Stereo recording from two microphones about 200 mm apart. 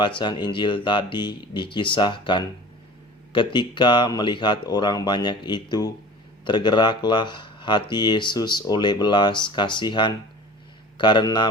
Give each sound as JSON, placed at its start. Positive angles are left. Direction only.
{"t": 0.2, "sound": "speech", "side_deg": 20}